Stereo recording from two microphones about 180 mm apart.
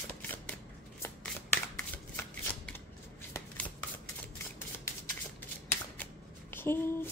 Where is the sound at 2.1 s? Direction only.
10° left (ahead or behind).